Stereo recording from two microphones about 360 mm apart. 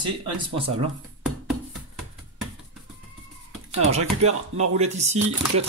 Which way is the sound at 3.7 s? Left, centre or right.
Centre.